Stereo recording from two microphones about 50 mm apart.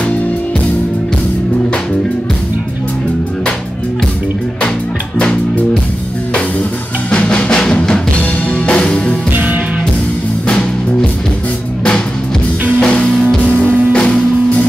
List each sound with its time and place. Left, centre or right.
7.1 s music: left
12.8 s music: left